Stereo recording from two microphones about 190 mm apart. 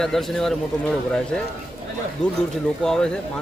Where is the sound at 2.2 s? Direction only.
5° left (ahead or behind).